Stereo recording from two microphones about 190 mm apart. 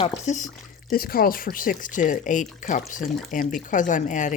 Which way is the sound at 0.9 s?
50° left (ahead or behind).